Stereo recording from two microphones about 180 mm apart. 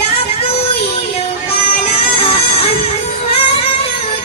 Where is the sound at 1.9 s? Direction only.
30° left (ahead or behind).